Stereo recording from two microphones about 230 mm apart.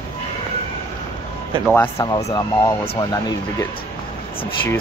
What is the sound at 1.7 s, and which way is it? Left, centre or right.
Speech, centre.